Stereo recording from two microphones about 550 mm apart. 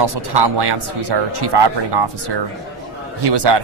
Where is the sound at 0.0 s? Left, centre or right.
Right.